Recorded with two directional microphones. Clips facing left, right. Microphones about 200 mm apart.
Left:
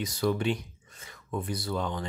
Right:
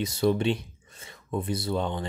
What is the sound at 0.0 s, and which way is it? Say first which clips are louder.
Speech: right 4 dB; 25° right (ahead or behind).